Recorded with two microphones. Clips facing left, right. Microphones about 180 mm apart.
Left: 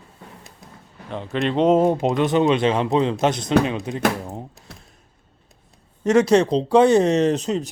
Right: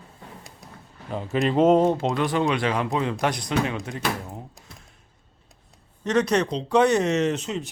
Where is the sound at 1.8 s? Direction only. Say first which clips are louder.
Left 3 dB; 15° left (ahead or behind).